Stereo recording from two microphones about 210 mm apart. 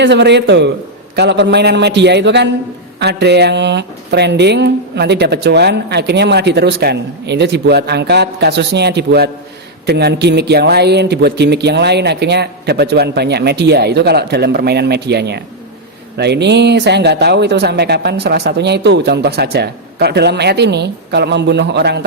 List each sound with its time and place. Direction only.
0.0 s a man's voice: 55° right (ahead or behind)